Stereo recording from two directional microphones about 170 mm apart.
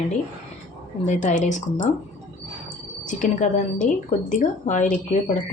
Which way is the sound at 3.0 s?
45° left (ahead or behind).